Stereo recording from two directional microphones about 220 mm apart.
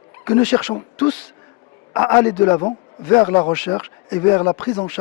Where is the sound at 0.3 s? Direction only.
15° left (ahead or behind).